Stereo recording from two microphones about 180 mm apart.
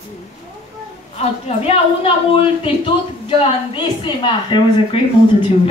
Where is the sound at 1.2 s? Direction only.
35° left (ahead or behind).